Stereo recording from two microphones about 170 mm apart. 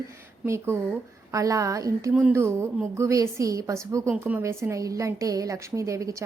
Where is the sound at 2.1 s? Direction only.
5° right (ahead or behind).